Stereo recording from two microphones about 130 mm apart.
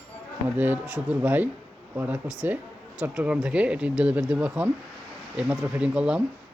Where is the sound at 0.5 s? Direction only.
15° right (ahead or behind).